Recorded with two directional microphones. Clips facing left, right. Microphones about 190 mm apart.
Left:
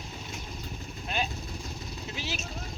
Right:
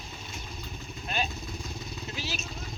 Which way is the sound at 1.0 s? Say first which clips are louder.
Even; 15° left (ahead or behind).